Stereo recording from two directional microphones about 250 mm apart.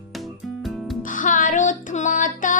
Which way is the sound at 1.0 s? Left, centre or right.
Left.